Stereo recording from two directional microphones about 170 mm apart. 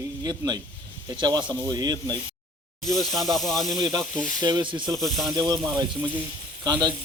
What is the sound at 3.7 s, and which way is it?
Speech, 25° right (ahead or behind).